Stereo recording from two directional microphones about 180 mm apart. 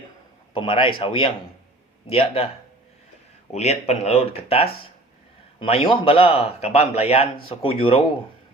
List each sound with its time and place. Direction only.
0.5 s a man's voice: 30° left (ahead or behind)
3.5 s a man's voice: 35° left (ahead or behind)